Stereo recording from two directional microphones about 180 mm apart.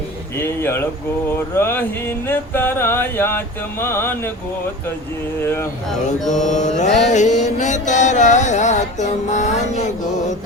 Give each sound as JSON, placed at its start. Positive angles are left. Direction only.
{"t": 0.3, "sound": "speech", "side_deg": 15}
{"t": 1.3, "sound": "a sound", "side_deg": 15}
{"t": 5.4, "sound": "a sound", "side_deg": 15}
{"t": 6.1, "sound": "mantra", "side_deg": 0}
{"t": 6.4, "sound": "mantra", "side_deg": 40}
{"t": 7.0, "sound": "music", "side_deg": 40}